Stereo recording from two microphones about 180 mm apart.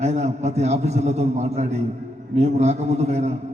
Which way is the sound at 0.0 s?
40° right (ahead or behind).